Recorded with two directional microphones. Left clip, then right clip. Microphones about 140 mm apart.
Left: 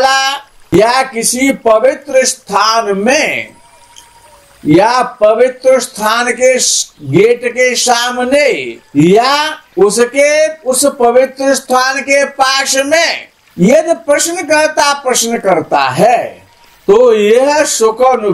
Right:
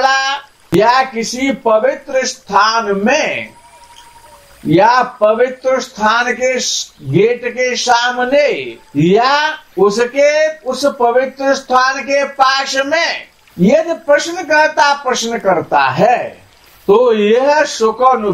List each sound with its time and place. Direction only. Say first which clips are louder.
0.0 s a sound: left 3 dB; 55° left (ahead or behind)
0.7 s speech: left 2 dB; 50° left (ahead or behind)
4.6 s speech: left 1 dB; 50° left (ahead or behind)